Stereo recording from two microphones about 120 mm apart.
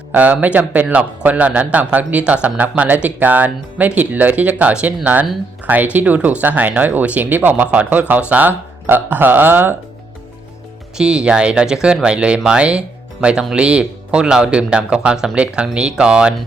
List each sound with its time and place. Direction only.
0.1 s speech: 15° right (ahead or behind)
10.9 s speech: 10° right (ahead or behind)